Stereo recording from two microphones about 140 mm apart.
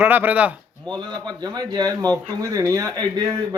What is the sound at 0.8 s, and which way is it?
Speech, 30° right (ahead or behind).